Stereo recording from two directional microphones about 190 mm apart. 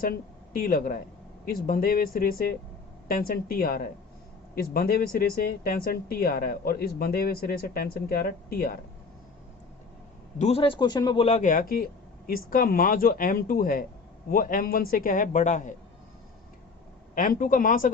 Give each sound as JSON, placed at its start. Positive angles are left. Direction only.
{"t": 0.0, "sound": "speech", "side_deg": 50}
{"t": 10.3, "sound": "speech", "side_deg": 35}
{"t": 11.3, "sound": "speech", "side_deg": 40}
{"t": 17.2, "sound": "speech", "side_deg": 45}